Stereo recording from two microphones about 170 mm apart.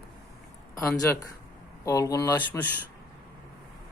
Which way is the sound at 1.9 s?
20° left (ahead or behind).